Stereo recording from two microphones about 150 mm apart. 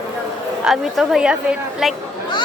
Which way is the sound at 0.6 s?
Centre (ahead or behind).